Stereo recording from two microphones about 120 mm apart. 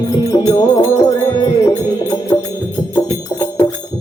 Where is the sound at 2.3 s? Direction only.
30° left (ahead or behind).